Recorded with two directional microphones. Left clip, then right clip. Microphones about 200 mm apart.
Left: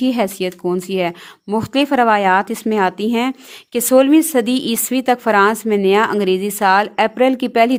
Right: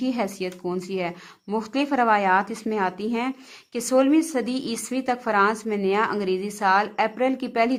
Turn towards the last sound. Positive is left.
turn(degrees=40)  # may be behind; listen again after turning